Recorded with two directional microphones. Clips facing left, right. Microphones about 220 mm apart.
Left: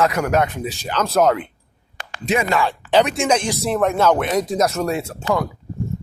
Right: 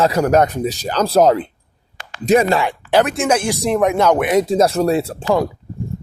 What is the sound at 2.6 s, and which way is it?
Speech, 10° right (ahead or behind).